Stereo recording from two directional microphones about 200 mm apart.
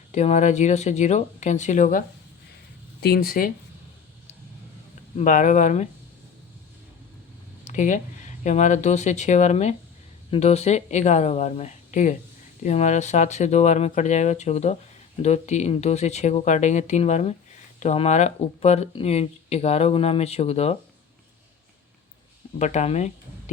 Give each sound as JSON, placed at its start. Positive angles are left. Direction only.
{"t": 0.1, "sound": "speech", "side_deg": 35}
{"t": 3.0, "sound": "speech", "side_deg": 50}
{"t": 5.1, "sound": "speech", "side_deg": 40}
{"t": 7.6, "sound": "a sound", "side_deg": 40}
{"t": 8.4, "sound": "speech", "side_deg": 35}
{"t": 22.5, "sound": "speech", "side_deg": 35}